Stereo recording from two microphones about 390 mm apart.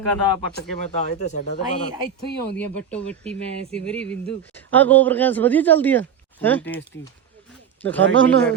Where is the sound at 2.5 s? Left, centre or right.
Centre.